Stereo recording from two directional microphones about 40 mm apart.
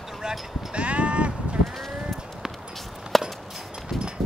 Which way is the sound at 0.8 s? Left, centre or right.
Right.